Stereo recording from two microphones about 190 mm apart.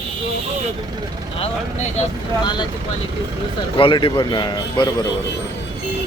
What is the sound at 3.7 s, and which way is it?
Speech, 25° left (ahead or behind).